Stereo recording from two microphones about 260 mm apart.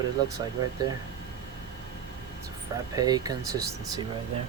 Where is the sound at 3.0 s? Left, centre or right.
Centre.